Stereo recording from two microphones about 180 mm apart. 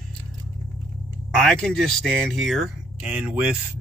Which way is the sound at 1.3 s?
5° left (ahead or behind).